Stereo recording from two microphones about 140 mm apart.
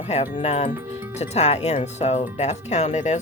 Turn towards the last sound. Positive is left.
turn(degrees=55)  # may be behind; listen again after turning